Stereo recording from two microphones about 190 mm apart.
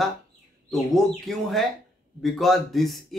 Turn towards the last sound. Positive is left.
turn(degrees=0)  # may be behind; listen again after turning